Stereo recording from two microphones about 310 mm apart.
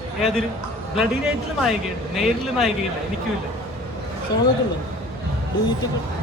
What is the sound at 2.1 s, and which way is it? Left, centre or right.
Speech, centre.